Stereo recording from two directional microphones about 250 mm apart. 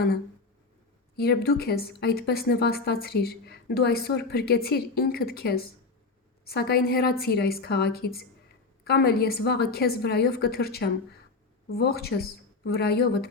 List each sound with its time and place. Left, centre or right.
1.1 s a woman's voice: left